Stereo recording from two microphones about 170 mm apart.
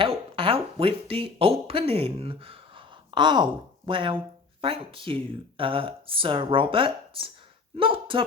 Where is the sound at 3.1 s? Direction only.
25° right (ahead or behind).